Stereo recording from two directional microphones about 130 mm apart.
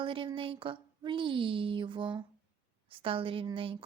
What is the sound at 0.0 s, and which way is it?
A woman's voice, 40° right (ahead or behind).